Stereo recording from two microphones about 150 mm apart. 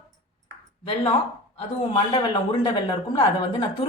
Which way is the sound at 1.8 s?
40° left (ahead or behind).